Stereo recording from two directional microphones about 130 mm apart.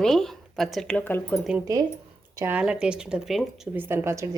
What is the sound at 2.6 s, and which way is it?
Speech, 5° right (ahead or behind).